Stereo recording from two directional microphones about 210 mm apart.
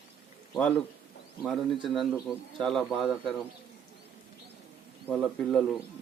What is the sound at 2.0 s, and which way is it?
Speech, centre (ahead or behind).